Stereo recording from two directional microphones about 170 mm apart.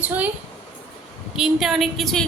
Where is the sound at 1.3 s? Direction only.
Centre (ahead or behind).